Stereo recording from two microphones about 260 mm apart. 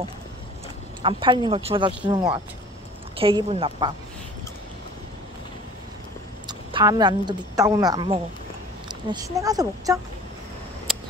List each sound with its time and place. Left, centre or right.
1.0 s speech: centre
6.4 s speech: centre